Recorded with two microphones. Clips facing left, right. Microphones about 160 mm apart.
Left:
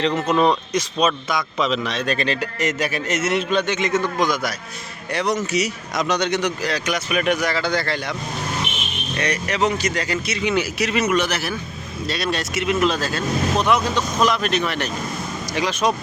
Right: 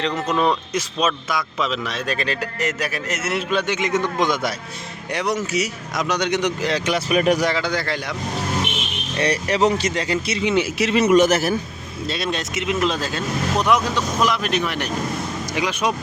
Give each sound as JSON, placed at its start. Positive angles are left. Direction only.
{"t": 0.3, "sound": "a man's voice", "side_deg": 0}
{"t": 5.1, "sound": "speech", "side_deg": -10}
{"t": 7.5, "sound": "speech", "side_deg": -10}
{"t": 9.1, "sound": "speech", "side_deg": -35}
{"t": 11.2, "sound": "a man's voice", "side_deg": -45}
{"t": 12.0, "sound": "speech", "side_deg": -25}